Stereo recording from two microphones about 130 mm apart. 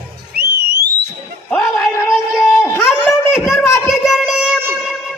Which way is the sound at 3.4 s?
Centre (ahead or behind).